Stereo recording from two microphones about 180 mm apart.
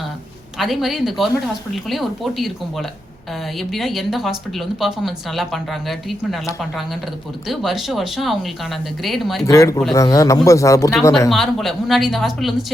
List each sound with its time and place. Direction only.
0.6 s speech: centre (ahead or behind)
7.4 s speech: centre (ahead or behind)
9.5 s speech: 15° left (ahead or behind)
11.3 s speech: centre (ahead or behind)